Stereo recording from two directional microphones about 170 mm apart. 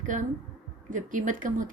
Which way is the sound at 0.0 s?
50° right (ahead or behind).